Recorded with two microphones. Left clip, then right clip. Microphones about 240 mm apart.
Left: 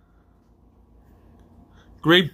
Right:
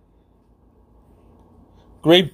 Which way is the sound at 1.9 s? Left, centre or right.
Left.